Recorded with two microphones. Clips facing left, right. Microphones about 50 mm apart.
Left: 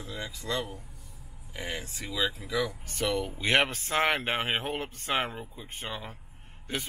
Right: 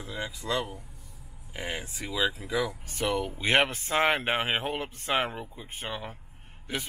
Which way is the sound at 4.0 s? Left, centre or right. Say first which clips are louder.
Right 2 dB; right.